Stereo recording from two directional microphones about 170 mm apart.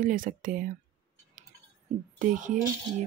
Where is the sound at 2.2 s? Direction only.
50° right (ahead or behind).